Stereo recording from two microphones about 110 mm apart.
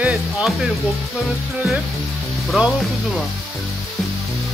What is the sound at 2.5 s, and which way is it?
Music, 10° right (ahead or behind).